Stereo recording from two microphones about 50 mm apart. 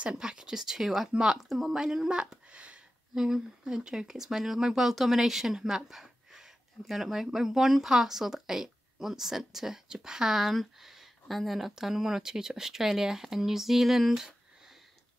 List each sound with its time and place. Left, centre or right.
0.0 s speech: centre
2.5 s a sound: right
3.2 s speech: centre